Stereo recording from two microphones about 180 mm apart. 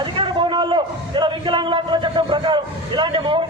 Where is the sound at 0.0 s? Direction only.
25° right (ahead or behind).